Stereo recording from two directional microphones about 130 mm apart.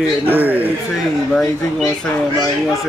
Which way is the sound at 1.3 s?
Centre (ahead or behind).